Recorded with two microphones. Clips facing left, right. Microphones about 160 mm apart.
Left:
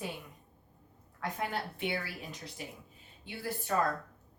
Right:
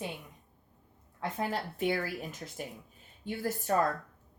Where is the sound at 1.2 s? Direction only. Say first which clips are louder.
Right 2 dB; 35° right (ahead or behind).